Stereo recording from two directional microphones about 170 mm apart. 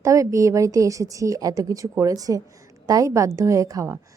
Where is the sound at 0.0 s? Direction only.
20° right (ahead or behind).